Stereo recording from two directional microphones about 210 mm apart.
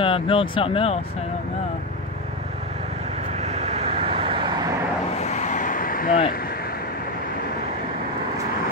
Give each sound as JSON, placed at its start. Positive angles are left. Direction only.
{"t": 0.0, "sound": "speech", "side_deg": 25}
{"t": 3.3, "sound": "vehicle", "side_deg": -30}
{"t": 5.2, "sound": "vehicle", "side_deg": 35}